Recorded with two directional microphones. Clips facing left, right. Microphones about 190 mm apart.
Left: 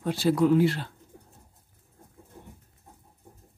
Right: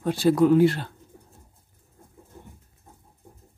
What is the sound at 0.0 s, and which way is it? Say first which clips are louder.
Speech: right 4 dB; 50° right (ahead or behind).